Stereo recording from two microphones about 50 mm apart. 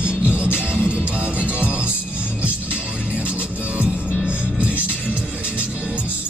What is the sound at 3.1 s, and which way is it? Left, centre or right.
Music, right.